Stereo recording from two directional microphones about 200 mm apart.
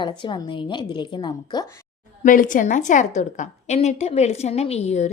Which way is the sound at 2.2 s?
40° left (ahead or behind).